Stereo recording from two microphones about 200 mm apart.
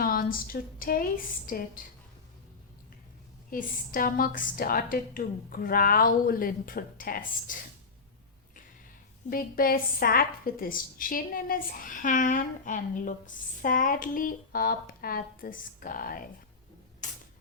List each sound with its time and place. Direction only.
0.0 s a woman's voice: 45° left (ahead or behind)
3.5 s a woman's voice: 45° left (ahead or behind)
9.3 s a woman's voice: 45° left (ahead or behind)
17.0 s mechanisms: 40° left (ahead or behind)